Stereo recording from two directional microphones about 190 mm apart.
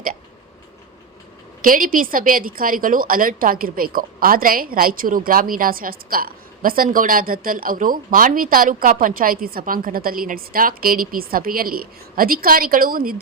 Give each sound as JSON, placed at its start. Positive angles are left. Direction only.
{"t": 1.6, "sound": "a woman's voice", "side_deg": -45}